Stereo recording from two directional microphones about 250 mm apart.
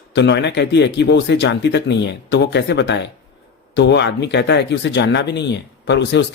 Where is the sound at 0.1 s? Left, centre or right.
Left.